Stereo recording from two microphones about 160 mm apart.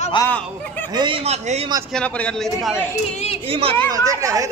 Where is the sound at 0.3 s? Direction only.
10° left (ahead or behind).